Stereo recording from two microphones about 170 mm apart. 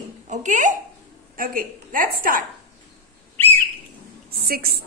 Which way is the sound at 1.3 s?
55° right (ahead or behind).